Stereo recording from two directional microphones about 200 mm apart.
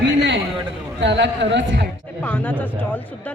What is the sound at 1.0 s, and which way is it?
Speech, 60° right (ahead or behind).